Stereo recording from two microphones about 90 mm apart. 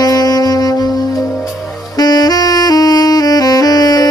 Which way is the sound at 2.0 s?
50° left (ahead or behind).